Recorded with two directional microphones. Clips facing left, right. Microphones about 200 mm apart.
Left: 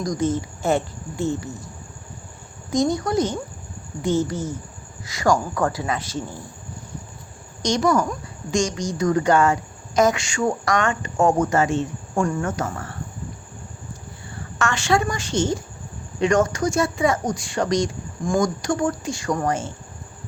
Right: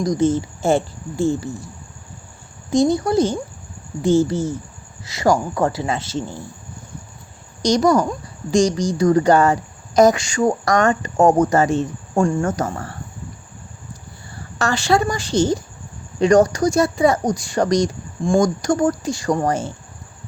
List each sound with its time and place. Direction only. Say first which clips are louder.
0.0 s speech: right 5 dB; 25° right (ahead or behind)
2.7 s speech: right 4 dB; 30° right (ahead or behind)
7.6 s speech: right 4 dB; 35° right (ahead or behind)
14.6 s speech: right 3 dB; 35° right (ahead or behind)